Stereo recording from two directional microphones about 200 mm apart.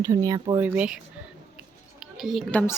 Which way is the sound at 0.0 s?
15° right (ahead or behind).